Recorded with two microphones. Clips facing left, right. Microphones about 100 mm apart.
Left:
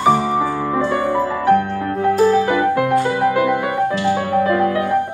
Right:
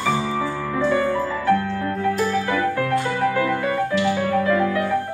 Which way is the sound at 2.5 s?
20° left (ahead or behind).